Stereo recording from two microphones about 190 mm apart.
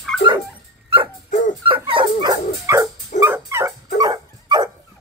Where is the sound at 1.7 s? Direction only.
25° right (ahead or behind).